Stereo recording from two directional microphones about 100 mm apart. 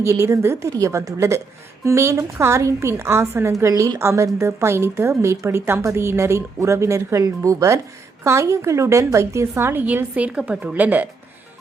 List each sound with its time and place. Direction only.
0.0 s a woman's voice: 30° right (ahead or behind)
9.8 s a woman's voice: 15° right (ahead or behind)